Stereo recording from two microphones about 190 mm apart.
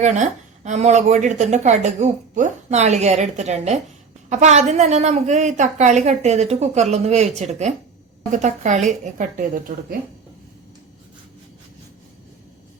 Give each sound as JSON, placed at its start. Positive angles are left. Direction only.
{"t": 0.0, "sound": "a woman's voice", "side_deg": -40}